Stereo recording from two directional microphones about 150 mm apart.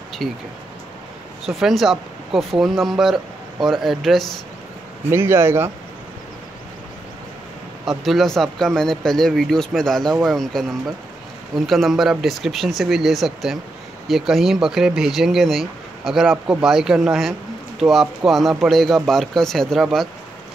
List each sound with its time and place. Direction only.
0.2 s speech: centre (ahead or behind)
1.4 s speech: centre (ahead or behind)
5.1 s speech: 15° right (ahead or behind)
8.0 s speech: centre (ahead or behind)